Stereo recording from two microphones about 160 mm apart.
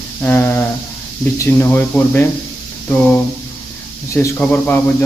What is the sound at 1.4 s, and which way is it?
Speech, 15° left (ahead or behind).